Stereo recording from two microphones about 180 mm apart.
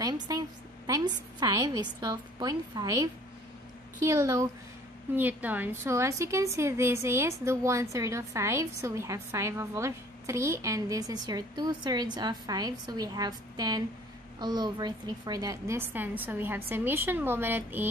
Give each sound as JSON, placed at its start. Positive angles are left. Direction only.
{"t": 0.8, "sound": "a woman's voice", "side_deg": -20}